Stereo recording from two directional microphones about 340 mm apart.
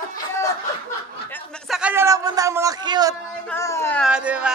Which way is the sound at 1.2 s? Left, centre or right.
Centre.